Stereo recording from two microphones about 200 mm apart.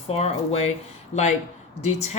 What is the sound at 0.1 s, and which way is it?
Speech, 30° left (ahead or behind).